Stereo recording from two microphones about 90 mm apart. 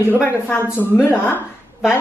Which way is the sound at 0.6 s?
25° left (ahead or behind).